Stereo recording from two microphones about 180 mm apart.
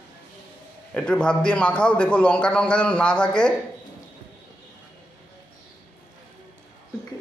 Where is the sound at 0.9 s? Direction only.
5° left (ahead or behind).